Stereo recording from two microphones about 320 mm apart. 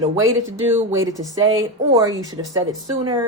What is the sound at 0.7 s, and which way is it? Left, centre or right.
Speech, centre.